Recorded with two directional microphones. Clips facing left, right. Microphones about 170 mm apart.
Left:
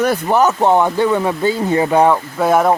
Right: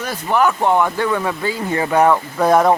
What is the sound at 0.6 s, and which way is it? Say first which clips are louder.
Speech: left 3 dB; 25° left (ahead or behind).